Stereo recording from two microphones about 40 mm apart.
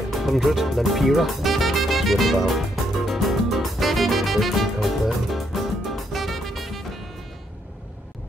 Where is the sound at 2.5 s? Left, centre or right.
Centre.